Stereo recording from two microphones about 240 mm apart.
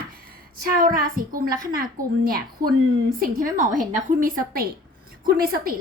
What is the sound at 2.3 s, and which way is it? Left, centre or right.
Speech, right.